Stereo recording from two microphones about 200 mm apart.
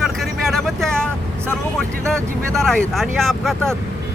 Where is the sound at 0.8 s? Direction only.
5° left (ahead or behind).